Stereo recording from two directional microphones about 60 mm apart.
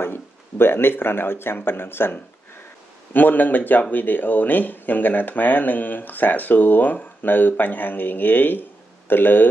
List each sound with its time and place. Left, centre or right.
0.0 s speech: left